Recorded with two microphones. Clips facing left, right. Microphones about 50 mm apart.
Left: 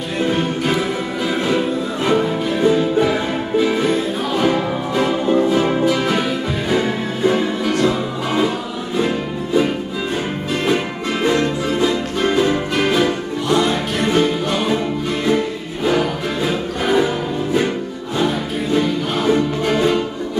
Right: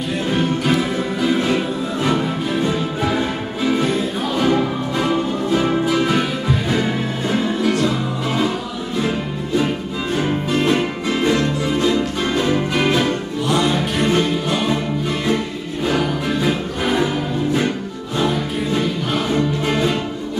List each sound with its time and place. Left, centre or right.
0.3 s music: centre
10.5 s music: centre
18.1 s music: centre